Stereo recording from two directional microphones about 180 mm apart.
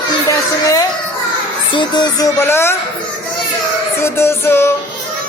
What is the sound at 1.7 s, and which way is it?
Speech, 25° left (ahead or behind).